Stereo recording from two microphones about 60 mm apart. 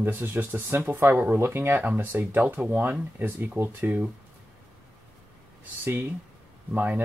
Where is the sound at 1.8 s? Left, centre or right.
Right.